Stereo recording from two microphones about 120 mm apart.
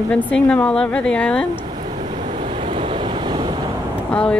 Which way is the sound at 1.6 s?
45° right (ahead or behind).